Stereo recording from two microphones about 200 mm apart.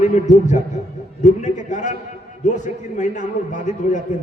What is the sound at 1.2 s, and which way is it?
A man's voice, 35° left (ahead or behind).